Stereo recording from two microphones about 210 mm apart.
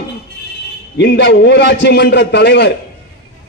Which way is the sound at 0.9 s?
55° left (ahead or behind).